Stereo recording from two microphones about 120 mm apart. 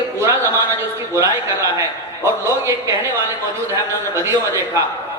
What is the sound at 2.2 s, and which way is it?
A man's voice, 25° right (ahead or behind).